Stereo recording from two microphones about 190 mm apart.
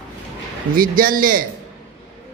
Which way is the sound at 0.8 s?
50° right (ahead or behind).